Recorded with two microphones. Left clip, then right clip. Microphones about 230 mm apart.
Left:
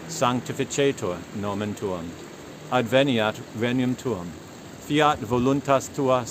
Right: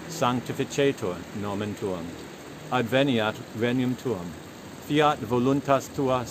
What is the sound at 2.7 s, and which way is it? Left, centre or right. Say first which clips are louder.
Speech: left 3 dB; centre.